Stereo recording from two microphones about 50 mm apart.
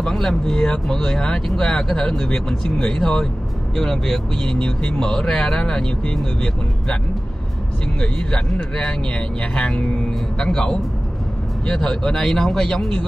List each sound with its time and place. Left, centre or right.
0.0 s speech: centre
8.0 s speech: centre